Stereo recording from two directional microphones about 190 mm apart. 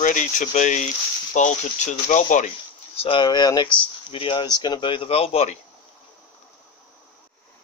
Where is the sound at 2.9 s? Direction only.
30° left (ahead or behind).